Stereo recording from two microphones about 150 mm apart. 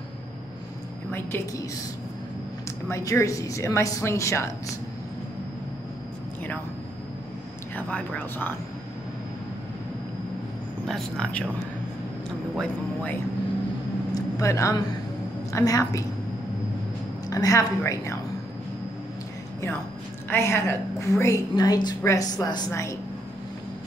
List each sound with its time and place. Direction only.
1.1 s speech: 15° left (ahead or behind)
2.9 s a woman's voice: 20° left (ahead or behind)
7.7 s speech: 10° left (ahead or behind)
10.9 s speech: 5° left (ahead or behind)
12.5 s speech: 10° left (ahead or behind)
14.1 s a sound: 20° left (ahead or behind)
15.5 s a woman's voice: 25° left (ahead or behind)
17.3 s a woman's voice: 20° left (ahead or behind)
20.2 s a woman's voice: 15° left (ahead or behind)